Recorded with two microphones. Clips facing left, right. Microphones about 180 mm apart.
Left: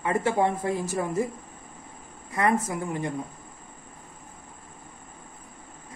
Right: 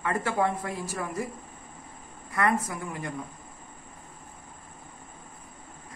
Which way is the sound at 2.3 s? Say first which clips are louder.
Left 2 dB; 20° left (ahead or behind).